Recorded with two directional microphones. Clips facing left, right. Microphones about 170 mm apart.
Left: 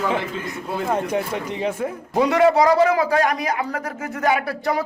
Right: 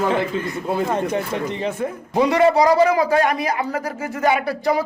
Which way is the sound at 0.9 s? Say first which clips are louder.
Right 1 dB; 10° left (ahead or behind).